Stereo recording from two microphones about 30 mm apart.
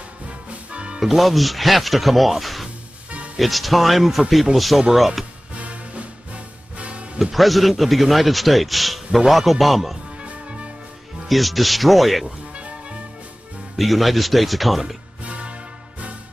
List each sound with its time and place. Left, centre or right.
0.5 s music: right
1.0 s a man's voice: centre
5.5 s music: right
7.3 s a man's voice: centre
10.2 s music: right
11.2 s a man's voice: centre
12.5 s music: right
13.7 s a man's voice: centre
15.2 s music: right